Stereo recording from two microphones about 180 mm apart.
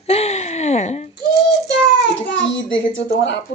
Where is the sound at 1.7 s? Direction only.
80° left.